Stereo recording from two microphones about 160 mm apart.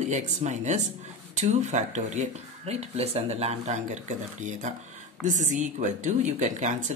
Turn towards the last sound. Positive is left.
turn(degrees=-50)  # may be behind; listen again after turning